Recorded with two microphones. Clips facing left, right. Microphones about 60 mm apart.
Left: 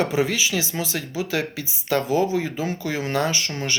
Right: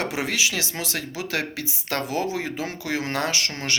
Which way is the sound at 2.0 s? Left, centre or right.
Right.